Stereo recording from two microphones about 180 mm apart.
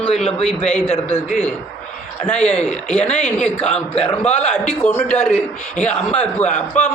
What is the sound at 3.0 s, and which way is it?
Speech, 35° left (ahead or behind).